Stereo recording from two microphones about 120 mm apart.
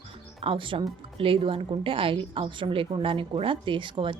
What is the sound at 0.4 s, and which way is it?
Speech, 45° right (ahead or behind).